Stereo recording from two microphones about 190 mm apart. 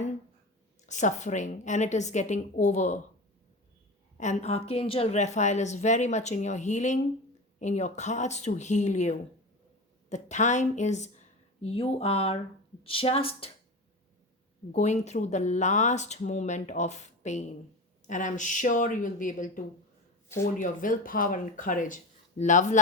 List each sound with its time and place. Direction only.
0.9 s speech: 40° left (ahead or behind)
4.2 s a woman's voice: 40° left (ahead or behind)
14.7 s speech: 35° left (ahead or behind)